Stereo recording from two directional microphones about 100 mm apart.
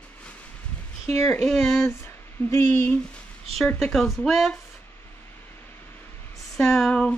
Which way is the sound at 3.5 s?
5° left (ahead or behind).